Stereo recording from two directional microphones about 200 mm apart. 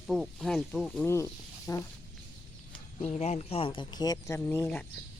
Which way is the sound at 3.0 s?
35° left (ahead or behind).